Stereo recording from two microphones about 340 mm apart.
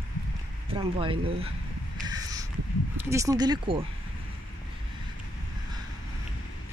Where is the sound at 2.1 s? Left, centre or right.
Centre.